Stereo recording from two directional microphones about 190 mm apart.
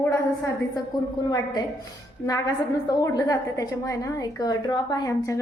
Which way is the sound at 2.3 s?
20° left (ahead or behind).